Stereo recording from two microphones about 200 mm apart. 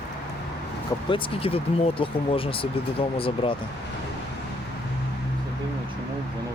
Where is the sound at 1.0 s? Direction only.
25° left (ahead or behind).